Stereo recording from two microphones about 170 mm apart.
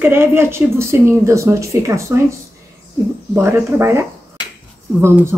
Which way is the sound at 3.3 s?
15° right (ahead or behind).